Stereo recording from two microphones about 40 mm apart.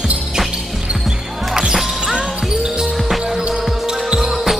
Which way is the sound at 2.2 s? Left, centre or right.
Right.